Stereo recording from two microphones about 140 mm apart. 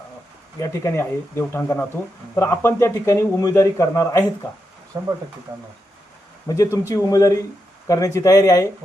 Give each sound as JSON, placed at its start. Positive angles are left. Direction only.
{"t": 0.6, "sound": "a man's voice", "side_deg": 20}
{"t": 4.9, "sound": "speech", "side_deg": -25}
{"t": 6.6, "sound": "a man's voice", "side_deg": 20}